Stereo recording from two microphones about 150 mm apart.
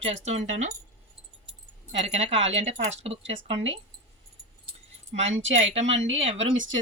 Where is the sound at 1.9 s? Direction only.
45° right (ahead or behind).